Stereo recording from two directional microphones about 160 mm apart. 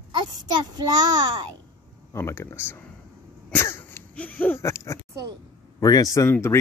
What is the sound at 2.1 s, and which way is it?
Speech, 15° left (ahead or behind).